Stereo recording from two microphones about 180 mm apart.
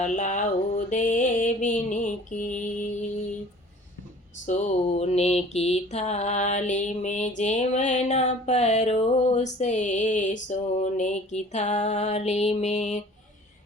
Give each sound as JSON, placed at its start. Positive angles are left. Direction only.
{"t": 0.0, "sound": "a sound", "side_deg": 45}
{"t": 0.9, "sound": "mantra", "side_deg": 45}
{"t": 4.4, "sound": "mantra", "side_deg": 40}